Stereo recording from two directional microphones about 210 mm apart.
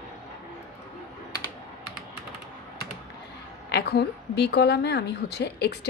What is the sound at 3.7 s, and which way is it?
A woman's voice, 50° left (ahead or behind).